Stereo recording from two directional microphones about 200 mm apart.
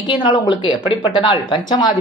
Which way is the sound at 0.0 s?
20° left (ahead or behind).